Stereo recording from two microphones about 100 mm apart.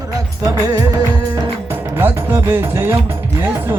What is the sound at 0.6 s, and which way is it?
Music, 40° right (ahead or behind).